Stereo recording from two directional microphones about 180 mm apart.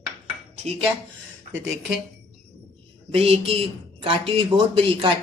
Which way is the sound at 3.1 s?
30° right (ahead or behind).